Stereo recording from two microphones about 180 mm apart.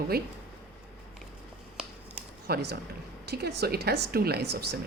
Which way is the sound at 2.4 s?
60° right (ahead or behind).